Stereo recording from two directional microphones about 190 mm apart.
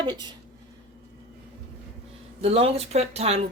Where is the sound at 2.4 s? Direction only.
30° right (ahead or behind).